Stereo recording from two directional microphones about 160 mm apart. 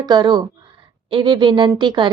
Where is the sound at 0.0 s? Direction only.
25° right (ahead or behind).